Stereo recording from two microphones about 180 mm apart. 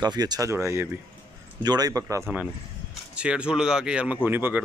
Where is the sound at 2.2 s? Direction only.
5° right (ahead or behind).